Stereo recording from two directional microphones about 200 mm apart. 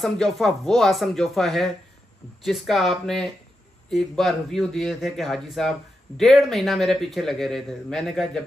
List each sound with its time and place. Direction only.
0.0 s a man's voice: centre (ahead or behind)